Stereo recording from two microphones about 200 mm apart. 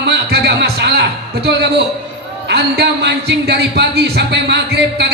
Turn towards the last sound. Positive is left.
turn(degrees=-55)  # may be behind; listen again after turning